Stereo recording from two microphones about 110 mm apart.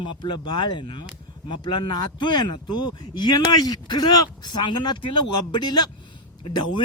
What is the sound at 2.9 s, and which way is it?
Speech, 40° left (ahead or behind).